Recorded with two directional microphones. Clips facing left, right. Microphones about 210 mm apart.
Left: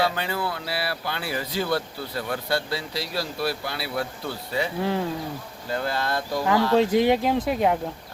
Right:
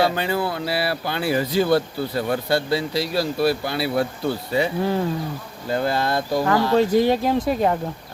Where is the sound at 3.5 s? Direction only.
15° right (ahead or behind).